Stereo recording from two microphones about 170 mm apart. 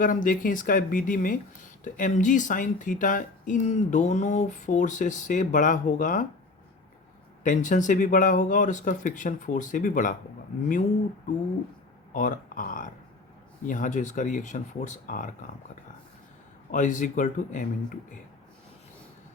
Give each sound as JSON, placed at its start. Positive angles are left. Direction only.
{"t": 0.0, "sound": "speech", "side_deg": 50}
{"t": 7.4, "sound": "speech", "side_deg": 45}
{"t": 12.1, "sound": "speech", "side_deg": 50}
{"t": 16.7, "sound": "speech", "side_deg": 50}